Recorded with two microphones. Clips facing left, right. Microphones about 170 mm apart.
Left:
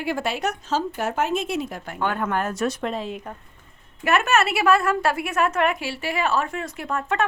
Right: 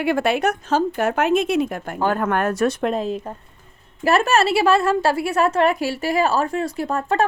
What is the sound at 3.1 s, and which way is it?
A woman's voice, 30° right (ahead or behind).